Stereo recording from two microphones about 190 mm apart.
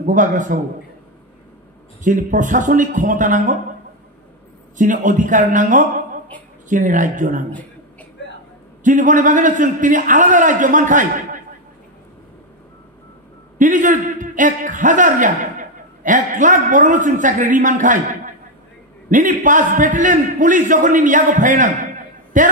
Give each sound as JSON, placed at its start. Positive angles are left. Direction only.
{"t": 0.0, "sound": "a man's voice", "side_deg": -40}
{"t": 2.0, "sound": "a man's voice", "side_deg": -45}
{"t": 4.7, "sound": "a man's voice", "side_deg": -45}
{"t": 8.2, "sound": "a sound", "side_deg": 70}
{"t": 8.8, "sound": "a man's voice", "side_deg": -40}
{"t": 13.6, "sound": "a man's voice", "side_deg": -45}